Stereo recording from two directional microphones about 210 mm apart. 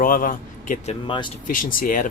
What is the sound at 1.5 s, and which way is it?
Speech, 40° left (ahead or behind).